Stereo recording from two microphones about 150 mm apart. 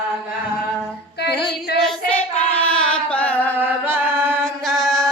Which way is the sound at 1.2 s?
90° left.